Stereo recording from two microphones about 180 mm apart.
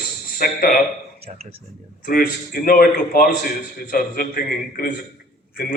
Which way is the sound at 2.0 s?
55° left (ahead or behind).